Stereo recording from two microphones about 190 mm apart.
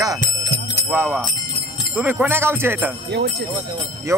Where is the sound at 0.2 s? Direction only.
60° left (ahead or behind).